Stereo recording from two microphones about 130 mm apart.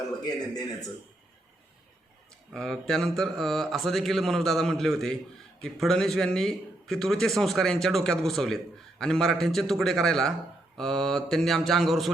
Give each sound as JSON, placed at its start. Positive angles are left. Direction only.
{"t": 2.5, "sound": "a man's voice", "side_deg": 5}